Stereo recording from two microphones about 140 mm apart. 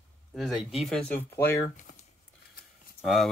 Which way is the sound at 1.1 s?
15° left (ahead or behind).